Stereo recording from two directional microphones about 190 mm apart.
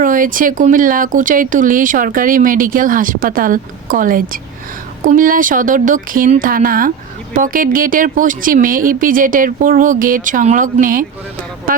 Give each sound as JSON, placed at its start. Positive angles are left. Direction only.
{"t": 0.0, "sound": "speech", "side_deg": -45}